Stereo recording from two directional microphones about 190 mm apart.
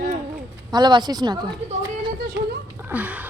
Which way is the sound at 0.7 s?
25° right (ahead or behind).